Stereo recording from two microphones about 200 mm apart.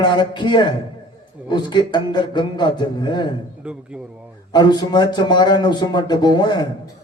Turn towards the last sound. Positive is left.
turn(degrees=20)  # may be behind; listen again after turning